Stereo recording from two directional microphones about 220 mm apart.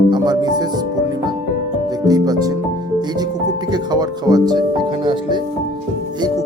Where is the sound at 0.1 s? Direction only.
20° right (ahead or behind).